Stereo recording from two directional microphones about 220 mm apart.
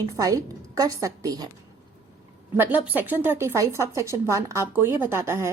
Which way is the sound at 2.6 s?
10° right (ahead or behind).